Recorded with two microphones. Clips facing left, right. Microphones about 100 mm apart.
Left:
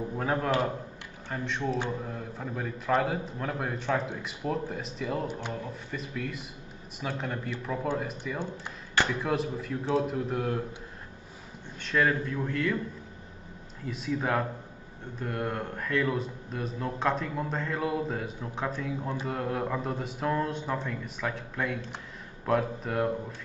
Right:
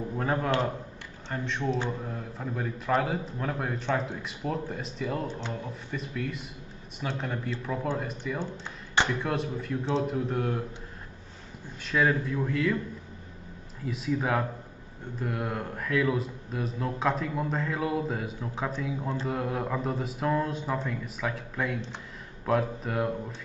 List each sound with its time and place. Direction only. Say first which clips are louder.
0.1 s speech: right 1 dB; centre (ahead or behind)
11.8 s speech: right 1 dB; 5° right (ahead or behind)
13.8 s speech: right 1 dB; centre (ahead or behind)